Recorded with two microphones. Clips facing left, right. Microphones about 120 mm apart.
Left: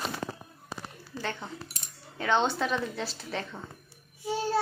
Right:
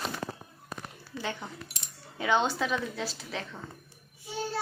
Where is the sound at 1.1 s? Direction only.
35° left (ahead or behind).